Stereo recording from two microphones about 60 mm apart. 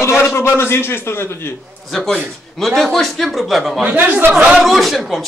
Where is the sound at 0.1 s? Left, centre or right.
Left.